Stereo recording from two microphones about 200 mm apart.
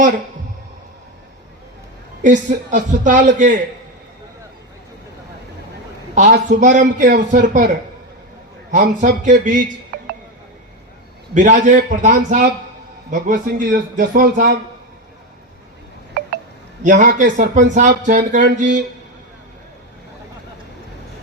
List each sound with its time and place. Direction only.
2.2 s a man's voice: 40° right (ahead or behind)
6.1 s a man's voice: 35° right (ahead or behind)
8.7 s a man's voice: 40° right (ahead or behind)
11.3 s a man's voice: 40° right (ahead or behind)
16.8 s a man's voice: 40° right (ahead or behind)